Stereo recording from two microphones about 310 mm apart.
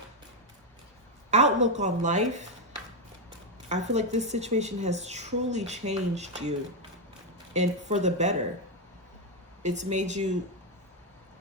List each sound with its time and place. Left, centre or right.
1.3 s a sound: right
1.7 s a woman's voice: right
3.7 s a woman's voice: right
7.5 s a woman's voice: right
9.6 s a woman's voice: right